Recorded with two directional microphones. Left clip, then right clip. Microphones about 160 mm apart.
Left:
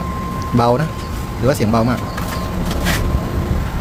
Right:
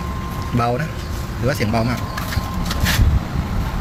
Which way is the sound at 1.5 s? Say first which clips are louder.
Left 5 dB; 30° left (ahead or behind).